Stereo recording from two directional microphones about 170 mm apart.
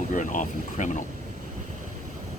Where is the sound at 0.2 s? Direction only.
50° left (ahead or behind).